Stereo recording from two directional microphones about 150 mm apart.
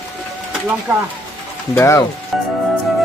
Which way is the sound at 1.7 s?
15° left (ahead or behind).